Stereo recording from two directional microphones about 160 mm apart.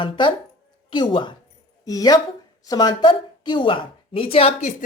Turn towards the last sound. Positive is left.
turn(degrees=45)  # may be behind; listen again after turning